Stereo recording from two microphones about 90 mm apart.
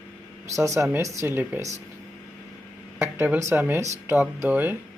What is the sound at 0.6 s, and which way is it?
Speech, 30° right (ahead or behind).